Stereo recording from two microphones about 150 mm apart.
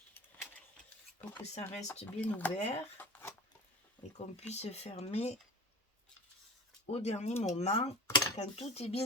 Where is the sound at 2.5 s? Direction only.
45° left (ahead or behind).